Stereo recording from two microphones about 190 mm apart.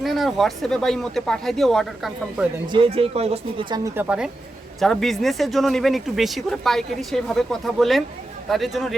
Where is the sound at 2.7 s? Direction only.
30° right (ahead or behind).